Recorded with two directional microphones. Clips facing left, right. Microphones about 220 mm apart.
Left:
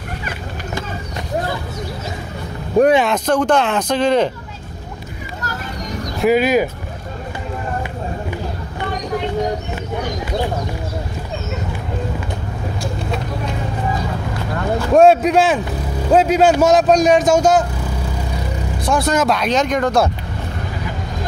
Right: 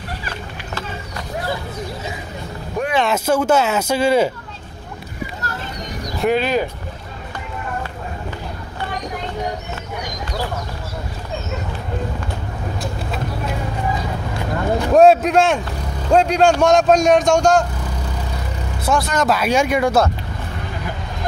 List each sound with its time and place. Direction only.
2.8 s speech: 25° left (ahead or behind)
3.1 s speech: 5° right (ahead or behind)
6.2 s speech: 10° left (ahead or behind)
15.0 s speech: centre (ahead or behind)
18.9 s speech: centre (ahead or behind)